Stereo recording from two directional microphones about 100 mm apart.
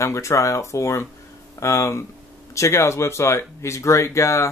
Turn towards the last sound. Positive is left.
turn(degrees=30)  # may be behind; listen again after turning